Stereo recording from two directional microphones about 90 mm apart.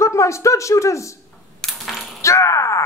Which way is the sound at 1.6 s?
Centre (ahead or behind).